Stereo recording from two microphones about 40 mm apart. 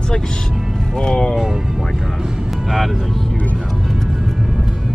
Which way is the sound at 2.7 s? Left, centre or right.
Centre.